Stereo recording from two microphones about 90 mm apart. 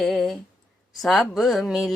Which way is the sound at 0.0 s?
Centre (ahead or behind).